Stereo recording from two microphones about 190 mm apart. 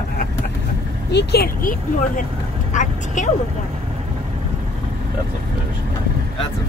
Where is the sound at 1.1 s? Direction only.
60° left (ahead or behind).